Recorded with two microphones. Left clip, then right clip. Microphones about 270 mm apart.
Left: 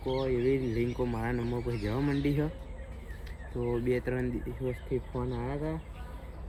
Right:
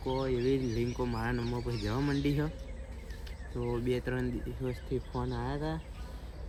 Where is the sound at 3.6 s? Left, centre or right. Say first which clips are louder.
Left 3 dB; centre.